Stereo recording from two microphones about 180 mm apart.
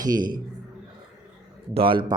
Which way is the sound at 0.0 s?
25° right (ahead or behind).